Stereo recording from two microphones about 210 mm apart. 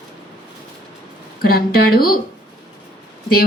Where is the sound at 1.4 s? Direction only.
45° left (ahead or behind).